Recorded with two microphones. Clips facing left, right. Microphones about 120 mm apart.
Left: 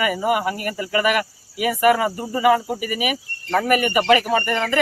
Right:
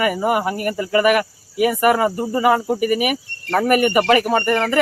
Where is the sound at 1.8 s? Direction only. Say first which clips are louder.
Left 2 dB; 40° right (ahead or behind).